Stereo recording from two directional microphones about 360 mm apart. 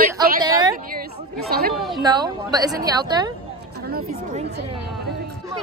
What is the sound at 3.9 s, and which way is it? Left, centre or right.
Speech, right.